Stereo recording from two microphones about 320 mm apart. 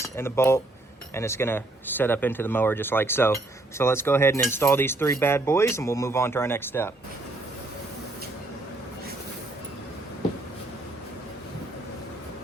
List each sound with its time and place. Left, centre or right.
0.0 s cutlery: centre